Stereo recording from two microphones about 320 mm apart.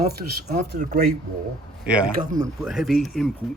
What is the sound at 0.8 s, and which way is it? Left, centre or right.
Speech, right.